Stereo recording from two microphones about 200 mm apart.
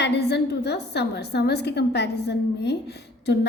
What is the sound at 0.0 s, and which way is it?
A woman's voice, 55° left (ahead or behind).